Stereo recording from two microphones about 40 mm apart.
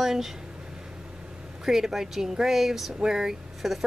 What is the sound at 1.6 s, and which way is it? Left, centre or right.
Speech, centre.